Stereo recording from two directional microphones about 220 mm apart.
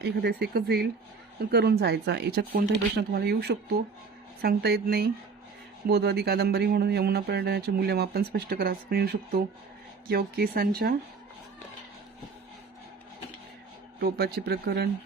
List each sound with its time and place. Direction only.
0.0 s speech: 50° right (ahead or behind)
14.0 s speech: 45° right (ahead or behind)